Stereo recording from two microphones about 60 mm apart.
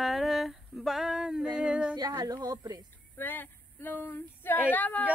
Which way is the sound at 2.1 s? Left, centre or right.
Right.